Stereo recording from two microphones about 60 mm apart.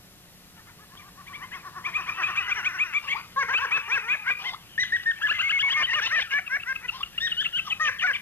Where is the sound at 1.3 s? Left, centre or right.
Left.